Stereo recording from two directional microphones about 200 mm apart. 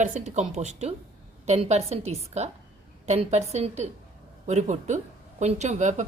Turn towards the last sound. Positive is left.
turn(degrees=-35)  # may be behind; listen again after turning